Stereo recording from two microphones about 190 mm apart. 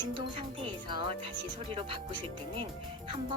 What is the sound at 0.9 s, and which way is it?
Speech, 25° right (ahead or behind).